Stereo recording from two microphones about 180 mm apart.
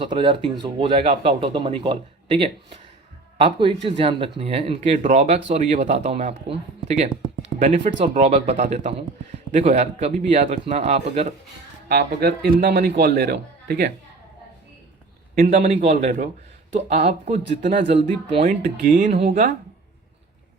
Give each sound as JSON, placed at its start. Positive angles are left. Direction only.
{"t": 0.1, "sound": "speech", "side_deg": -25}
{"t": 11.9, "sound": "a man's voice", "side_deg": -60}
{"t": 15.4, "sound": "speech", "side_deg": -35}